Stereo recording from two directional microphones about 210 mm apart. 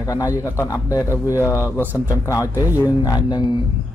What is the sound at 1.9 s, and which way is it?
Speech, 10° right (ahead or behind).